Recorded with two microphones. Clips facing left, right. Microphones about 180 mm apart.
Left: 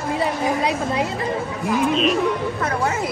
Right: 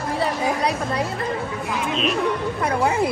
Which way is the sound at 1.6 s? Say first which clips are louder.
Left 7 dB; centre (ahead or behind).